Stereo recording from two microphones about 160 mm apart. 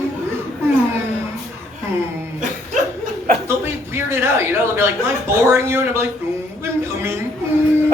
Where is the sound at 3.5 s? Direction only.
15° right (ahead or behind).